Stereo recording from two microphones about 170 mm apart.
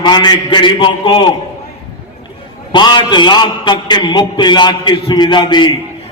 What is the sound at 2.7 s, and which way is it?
A man's voice, 25° left (ahead or behind).